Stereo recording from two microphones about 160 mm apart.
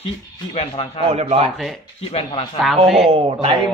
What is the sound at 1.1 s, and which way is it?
Speech, 40° right (ahead or behind).